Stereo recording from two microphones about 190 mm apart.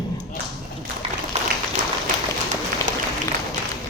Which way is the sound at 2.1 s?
45° right (ahead or behind).